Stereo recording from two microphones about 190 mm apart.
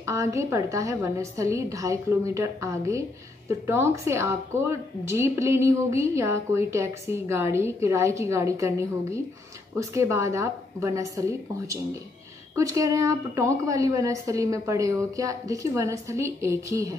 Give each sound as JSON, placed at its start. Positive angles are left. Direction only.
{"t": 0.0, "sound": "a woman's voice", "side_deg": -15}